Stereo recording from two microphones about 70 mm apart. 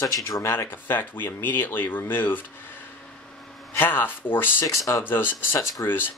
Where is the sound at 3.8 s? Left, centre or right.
Left.